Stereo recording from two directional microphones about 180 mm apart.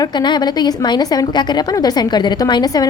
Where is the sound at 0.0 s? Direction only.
25° left (ahead or behind).